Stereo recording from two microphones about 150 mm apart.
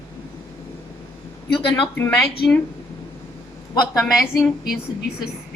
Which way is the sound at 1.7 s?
10° left (ahead or behind).